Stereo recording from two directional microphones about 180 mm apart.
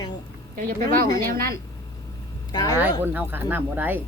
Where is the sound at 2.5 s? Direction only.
20° left (ahead or behind).